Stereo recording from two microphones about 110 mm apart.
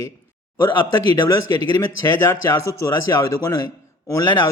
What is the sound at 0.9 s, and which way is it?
A man's voice, 35° left (ahead or behind).